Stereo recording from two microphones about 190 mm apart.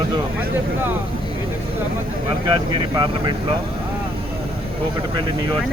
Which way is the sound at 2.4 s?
25° right (ahead or behind).